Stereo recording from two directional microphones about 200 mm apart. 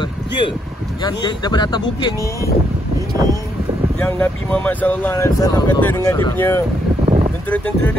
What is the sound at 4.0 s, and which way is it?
Speech, 5° left (ahead or behind).